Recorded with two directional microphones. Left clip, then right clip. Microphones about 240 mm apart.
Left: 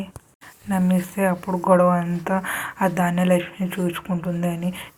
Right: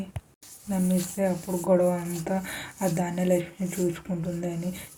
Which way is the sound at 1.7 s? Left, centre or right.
Centre.